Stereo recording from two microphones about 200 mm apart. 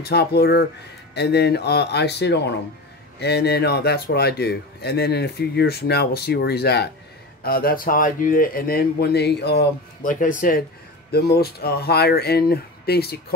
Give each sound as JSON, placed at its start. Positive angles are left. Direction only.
{"t": 0.0, "sound": "speech", "side_deg": 55}
{"t": 10.2, "sound": "speech", "side_deg": 40}